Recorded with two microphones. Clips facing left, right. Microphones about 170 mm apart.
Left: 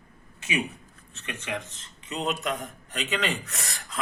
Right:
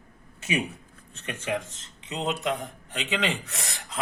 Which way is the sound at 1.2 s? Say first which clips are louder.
Right 4 dB; 30° right (ahead or behind).